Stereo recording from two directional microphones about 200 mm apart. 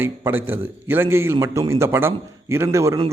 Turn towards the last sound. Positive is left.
turn(degrees=-15)  # may be behind; listen again after turning